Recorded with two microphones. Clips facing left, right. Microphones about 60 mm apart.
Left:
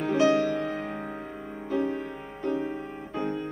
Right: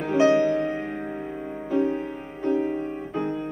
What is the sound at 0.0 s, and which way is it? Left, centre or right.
Music, centre.